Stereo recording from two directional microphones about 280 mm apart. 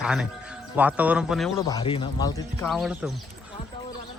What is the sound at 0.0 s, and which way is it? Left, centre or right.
A man's voice, centre.